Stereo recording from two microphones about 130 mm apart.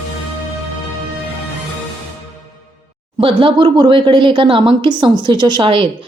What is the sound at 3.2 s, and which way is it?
A woman's voice, 45° right (ahead or behind).